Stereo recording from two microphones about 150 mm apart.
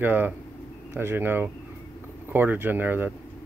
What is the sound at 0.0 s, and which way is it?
Speech, 15° right (ahead or behind).